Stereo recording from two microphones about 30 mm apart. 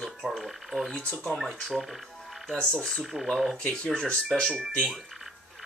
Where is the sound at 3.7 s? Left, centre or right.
Left.